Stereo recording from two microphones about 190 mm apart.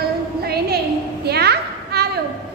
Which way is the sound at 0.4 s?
55° right (ahead or behind).